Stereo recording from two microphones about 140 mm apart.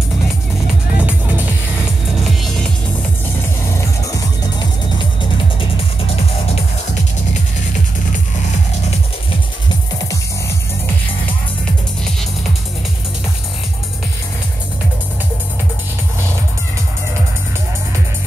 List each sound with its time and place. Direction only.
0.9 s music: 10° right (ahead or behind)
2.2 s music: 5° left (ahead or behind)
4.0 s music: 25° left (ahead or behind)
5.6 s music: 45° left (ahead or behind)